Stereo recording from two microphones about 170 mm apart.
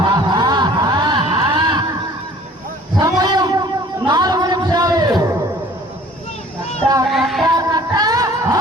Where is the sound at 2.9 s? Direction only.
25° right (ahead or behind).